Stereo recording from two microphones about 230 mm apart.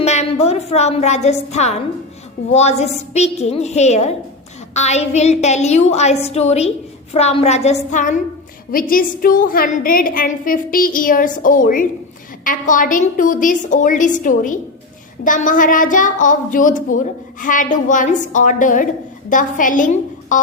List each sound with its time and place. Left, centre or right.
0.0 s a woman's voice: left